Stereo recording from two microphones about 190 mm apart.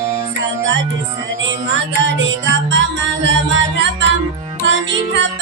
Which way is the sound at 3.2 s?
70° right (ahead or behind).